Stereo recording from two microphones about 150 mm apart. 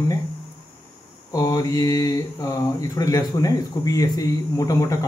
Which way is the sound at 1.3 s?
20° left (ahead or behind).